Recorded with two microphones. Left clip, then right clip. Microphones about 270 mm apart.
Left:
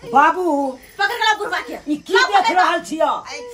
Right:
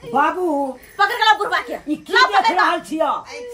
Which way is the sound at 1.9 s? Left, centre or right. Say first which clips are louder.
Even; centre.